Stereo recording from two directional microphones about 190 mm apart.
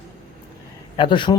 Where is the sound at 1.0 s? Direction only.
25° left (ahead or behind).